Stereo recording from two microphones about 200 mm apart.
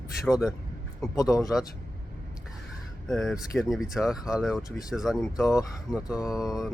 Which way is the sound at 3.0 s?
Centre (ahead or behind).